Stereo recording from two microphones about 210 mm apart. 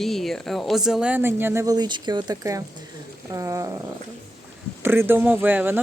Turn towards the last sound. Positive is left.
turn(degrees=-10)  # may be behind; listen again after turning